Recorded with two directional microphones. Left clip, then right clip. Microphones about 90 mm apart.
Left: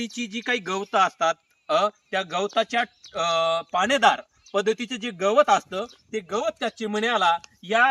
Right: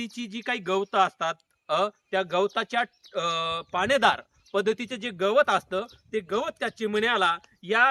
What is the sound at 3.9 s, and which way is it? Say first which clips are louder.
Speech: left 2 dB; 60° right (ahead or behind).